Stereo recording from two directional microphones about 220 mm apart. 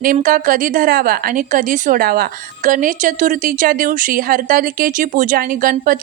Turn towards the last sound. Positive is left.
turn(degrees=-40)  # may be behind; listen again after turning